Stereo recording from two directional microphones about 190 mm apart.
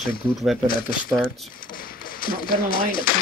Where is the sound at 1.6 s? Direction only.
50° left (ahead or behind).